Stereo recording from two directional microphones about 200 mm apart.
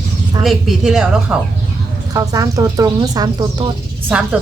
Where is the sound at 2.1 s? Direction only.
15° right (ahead or behind).